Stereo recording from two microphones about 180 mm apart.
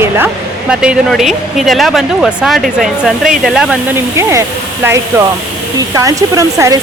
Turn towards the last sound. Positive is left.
turn(degrees=-15)  # may be behind; listen again after turning